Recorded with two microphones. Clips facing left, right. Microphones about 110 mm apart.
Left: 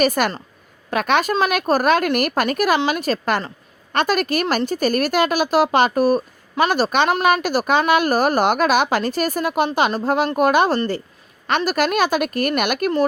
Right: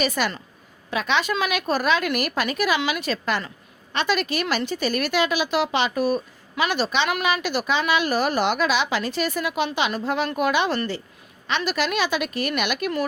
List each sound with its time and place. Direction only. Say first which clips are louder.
0.0 s a woman's voice: left 6 dB; 50° left (ahead or behind)